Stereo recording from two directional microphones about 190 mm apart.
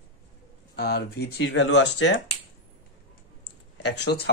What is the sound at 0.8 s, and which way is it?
Speech, 60° left (ahead or behind).